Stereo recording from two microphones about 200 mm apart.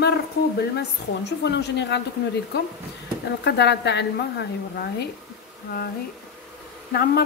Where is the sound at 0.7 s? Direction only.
60° left (ahead or behind).